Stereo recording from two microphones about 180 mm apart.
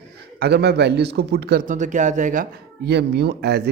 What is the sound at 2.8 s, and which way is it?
Speech, 65° right (ahead or behind).